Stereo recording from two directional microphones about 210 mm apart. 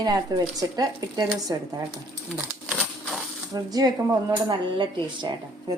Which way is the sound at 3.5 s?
15° right (ahead or behind).